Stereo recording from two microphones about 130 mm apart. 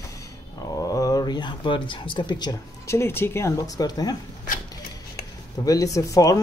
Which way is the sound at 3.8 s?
30° left (ahead or behind).